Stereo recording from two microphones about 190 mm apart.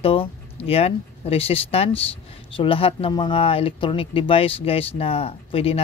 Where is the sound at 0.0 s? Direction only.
30° left (ahead or behind).